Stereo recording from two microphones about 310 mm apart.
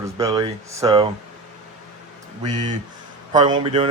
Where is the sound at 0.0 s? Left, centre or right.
Centre.